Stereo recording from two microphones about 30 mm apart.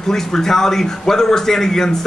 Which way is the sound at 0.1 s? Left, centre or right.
Centre.